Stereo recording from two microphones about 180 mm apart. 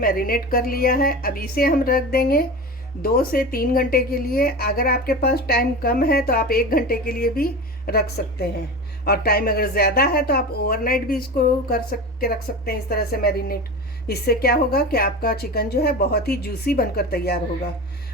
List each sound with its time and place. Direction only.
0.0 s speech: 55° left (ahead or behind)